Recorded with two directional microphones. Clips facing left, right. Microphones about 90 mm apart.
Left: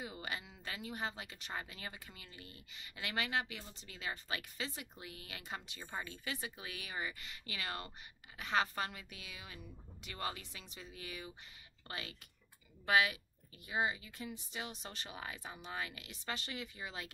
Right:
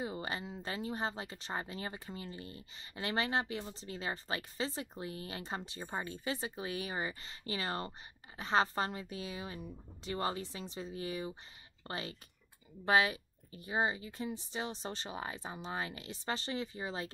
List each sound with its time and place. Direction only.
0.0 s speech: 30° right (ahead or behind)